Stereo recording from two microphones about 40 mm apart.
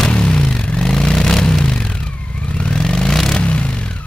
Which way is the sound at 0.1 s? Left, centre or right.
Left.